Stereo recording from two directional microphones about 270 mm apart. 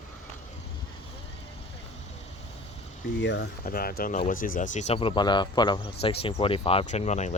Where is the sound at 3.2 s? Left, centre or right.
Left.